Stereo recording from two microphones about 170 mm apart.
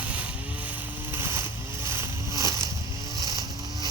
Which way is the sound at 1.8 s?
15° right (ahead or behind).